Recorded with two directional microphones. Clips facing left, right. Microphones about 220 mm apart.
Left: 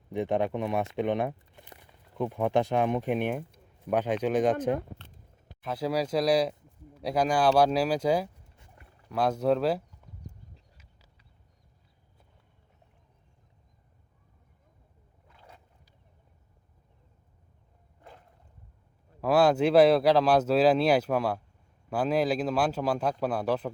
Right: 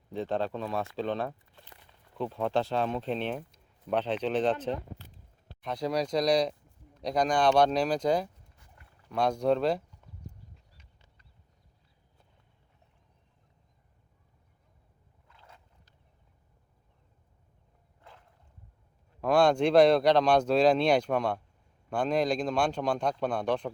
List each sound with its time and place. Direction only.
0.1 s speech: 15° left (ahead or behind)
5.6 s speech: 5° left (ahead or behind)
10.8 s a sound: 5° left (ahead or behind)
19.2 s speech: 5° left (ahead or behind)